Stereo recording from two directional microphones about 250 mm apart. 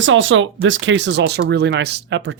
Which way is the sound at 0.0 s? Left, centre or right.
Right.